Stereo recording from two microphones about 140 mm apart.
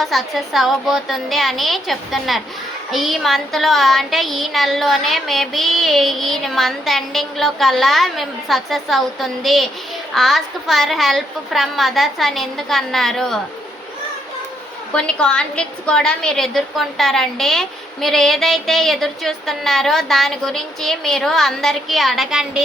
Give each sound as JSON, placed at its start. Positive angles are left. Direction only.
{"t": 0.0, "sound": "a woman's voice", "side_deg": 0}
{"t": 14.9, "sound": "a woman's voice", "side_deg": 5}